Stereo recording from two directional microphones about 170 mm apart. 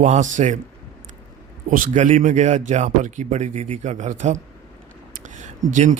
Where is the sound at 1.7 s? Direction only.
50° right (ahead or behind).